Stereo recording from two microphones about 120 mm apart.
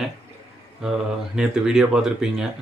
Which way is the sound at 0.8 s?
5° right (ahead or behind).